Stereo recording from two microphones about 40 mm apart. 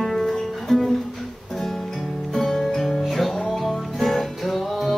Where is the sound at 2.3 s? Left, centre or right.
Centre.